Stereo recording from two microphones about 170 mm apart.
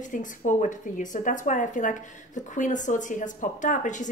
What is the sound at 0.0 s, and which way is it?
A woman's voice, 50° left (ahead or behind).